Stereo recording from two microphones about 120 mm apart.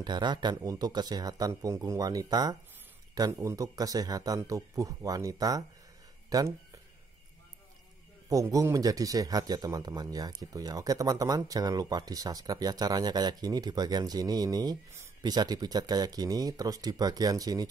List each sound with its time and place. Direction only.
0.0 s speech: 40° right (ahead or behind)
8.3 s speech: 30° right (ahead or behind)